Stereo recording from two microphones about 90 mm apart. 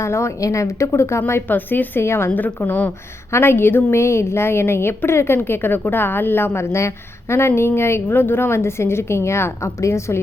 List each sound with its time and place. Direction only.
0.0 s a woman's voice: 30° left (ahead or behind)